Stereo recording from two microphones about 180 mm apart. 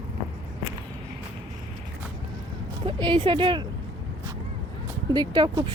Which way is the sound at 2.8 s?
25° right (ahead or behind).